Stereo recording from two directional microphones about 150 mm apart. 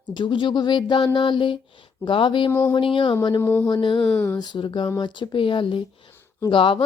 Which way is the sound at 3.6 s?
30° left (ahead or behind).